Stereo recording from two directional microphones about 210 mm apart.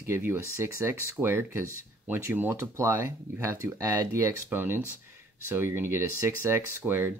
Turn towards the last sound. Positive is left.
turn(degrees=-10)  # may be behind; listen again after turning